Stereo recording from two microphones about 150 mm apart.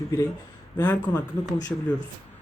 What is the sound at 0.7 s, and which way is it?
Speech, 15° left (ahead or behind).